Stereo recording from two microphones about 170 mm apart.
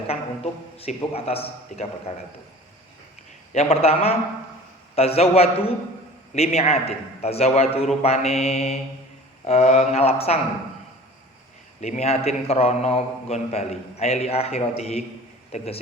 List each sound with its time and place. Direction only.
0.8 s a man's voice: 35° left (ahead or behind)
3.5 s a man's voice: 40° left (ahead or behind)
11.8 s a man's voice: 40° left (ahead or behind)